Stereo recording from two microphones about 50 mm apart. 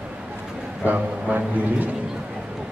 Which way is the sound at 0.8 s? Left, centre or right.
Right.